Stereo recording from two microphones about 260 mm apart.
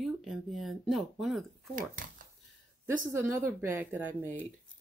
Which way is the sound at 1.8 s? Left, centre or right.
Right.